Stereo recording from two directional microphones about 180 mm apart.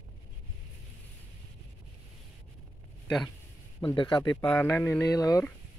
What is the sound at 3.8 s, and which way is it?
Speech, 25° left (ahead or behind).